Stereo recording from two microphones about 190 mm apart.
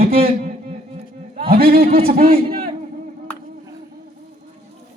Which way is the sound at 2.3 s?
30° right (ahead or behind).